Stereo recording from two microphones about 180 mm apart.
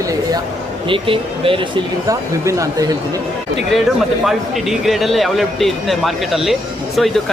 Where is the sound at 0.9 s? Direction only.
30° right (ahead or behind).